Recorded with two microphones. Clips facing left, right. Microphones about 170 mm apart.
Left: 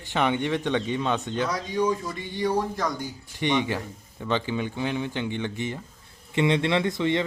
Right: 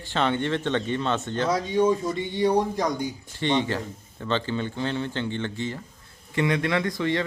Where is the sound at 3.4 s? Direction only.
15° left (ahead or behind).